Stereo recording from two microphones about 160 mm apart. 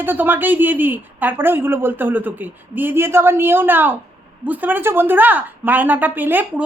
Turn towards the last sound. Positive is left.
turn(degrees=-10)  # may be behind; listen again after turning